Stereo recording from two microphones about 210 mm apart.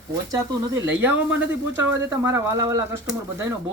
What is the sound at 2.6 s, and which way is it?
Speech, 15° right (ahead or behind).